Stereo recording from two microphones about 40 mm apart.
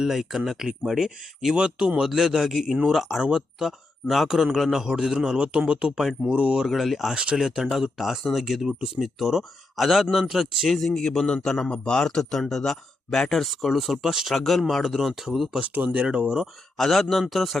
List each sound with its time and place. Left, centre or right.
0.0 s speech: centre
2.0 s speech: centre
6.7 s speech: centre
7.1 s speech: centre
10.7 s speech: centre
11.5 s speech: left
13.4 s speech: centre
14.3 s speech: centre
14.9 s speech: centre
15.6 s speech: right
16.0 s speech: right
16.7 s speech: centre